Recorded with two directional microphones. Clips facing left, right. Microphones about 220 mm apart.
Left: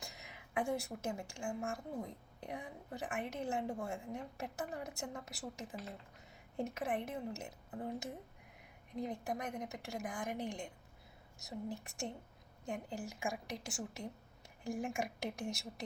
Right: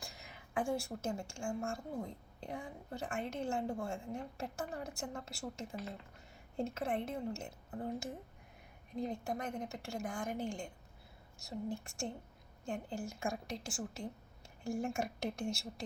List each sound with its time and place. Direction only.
0.0 s a woman's voice: 20° left (ahead or behind)
11.8 s a woman's voice: 20° left (ahead or behind)